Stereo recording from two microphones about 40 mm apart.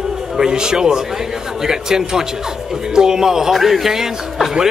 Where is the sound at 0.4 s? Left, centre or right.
Centre.